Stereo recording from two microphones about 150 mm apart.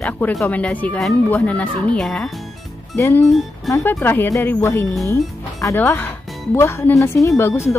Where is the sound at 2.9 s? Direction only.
20° left (ahead or behind).